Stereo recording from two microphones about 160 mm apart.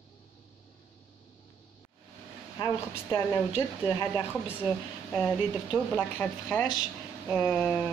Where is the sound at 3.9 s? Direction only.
15° left (ahead or behind).